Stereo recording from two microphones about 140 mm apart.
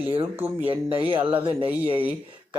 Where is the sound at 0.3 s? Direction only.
15° right (ahead or behind).